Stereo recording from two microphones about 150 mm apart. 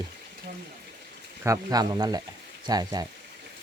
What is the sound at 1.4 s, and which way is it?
Speech, 20° right (ahead or behind).